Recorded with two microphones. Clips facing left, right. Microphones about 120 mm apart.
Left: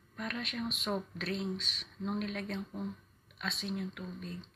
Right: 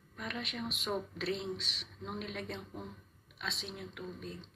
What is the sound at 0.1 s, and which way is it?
Speech, 15° right (ahead or behind).